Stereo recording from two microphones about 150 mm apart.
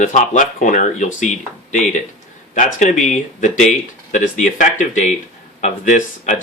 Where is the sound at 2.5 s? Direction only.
60° left (ahead or behind).